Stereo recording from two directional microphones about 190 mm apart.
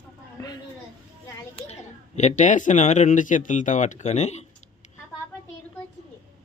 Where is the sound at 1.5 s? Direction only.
35° left (ahead or behind).